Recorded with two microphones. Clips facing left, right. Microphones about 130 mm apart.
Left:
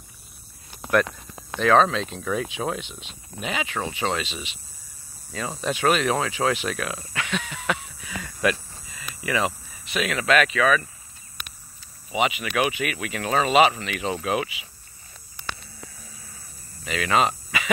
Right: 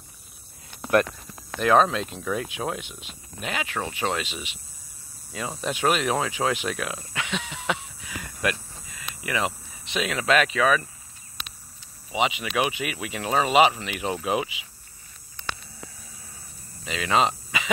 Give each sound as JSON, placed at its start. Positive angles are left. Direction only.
{"t": 1.6, "sound": "speech", "side_deg": -10}
{"t": 5.6, "sound": "speech", "side_deg": -15}
{"t": 7.2, "sound": "a sound", "side_deg": -20}
{"t": 8.2, "sound": "a sound", "side_deg": -10}
{"t": 9.2, "sound": "speech", "side_deg": -15}
{"t": 9.8, "sound": "speech", "side_deg": -25}
{"t": 12.2, "sound": "speech", "side_deg": -20}
{"t": 16.8, "sound": "mains hum", "side_deg": -20}